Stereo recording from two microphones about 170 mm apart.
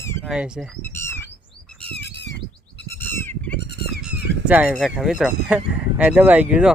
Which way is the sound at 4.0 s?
10° right (ahead or behind).